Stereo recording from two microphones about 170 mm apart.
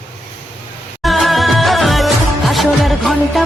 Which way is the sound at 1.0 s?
Centre (ahead or behind).